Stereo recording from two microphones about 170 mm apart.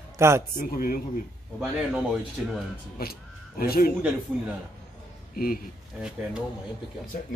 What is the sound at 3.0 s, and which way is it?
Speech, 65° left (ahead or behind).